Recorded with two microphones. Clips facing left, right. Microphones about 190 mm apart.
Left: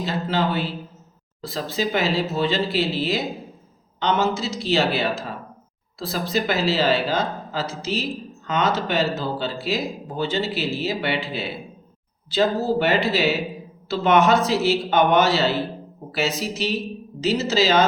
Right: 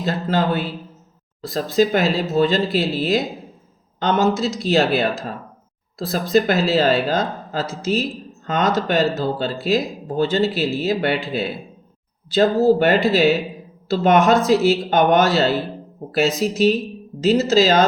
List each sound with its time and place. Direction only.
0.0 s speech: 50° right (ahead or behind)
6.1 s speech: 50° right (ahead or behind)